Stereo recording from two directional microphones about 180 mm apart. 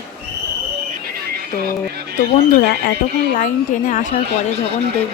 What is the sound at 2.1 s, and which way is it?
A woman's voice, 55° left (ahead or behind).